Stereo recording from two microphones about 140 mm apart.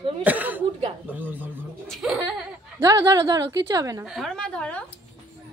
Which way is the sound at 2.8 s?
25° right (ahead or behind).